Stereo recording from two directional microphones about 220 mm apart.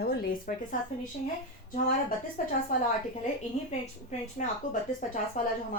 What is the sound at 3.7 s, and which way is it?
A woman's voice, 30° left (ahead or behind).